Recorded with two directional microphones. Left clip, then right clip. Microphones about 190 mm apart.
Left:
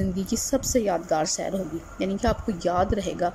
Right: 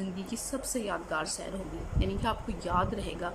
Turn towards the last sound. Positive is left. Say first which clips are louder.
# left 9 dB
turn(degrees=25)  # may be behind; listen again after turning